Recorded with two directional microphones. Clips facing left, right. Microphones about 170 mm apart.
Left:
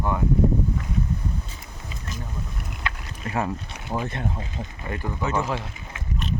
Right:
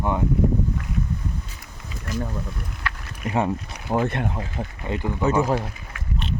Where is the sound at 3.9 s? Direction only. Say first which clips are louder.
Right 6 dB; 70° right (ahead or behind).